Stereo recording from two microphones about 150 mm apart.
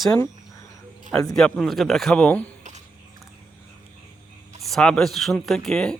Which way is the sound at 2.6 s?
50° right (ahead or behind).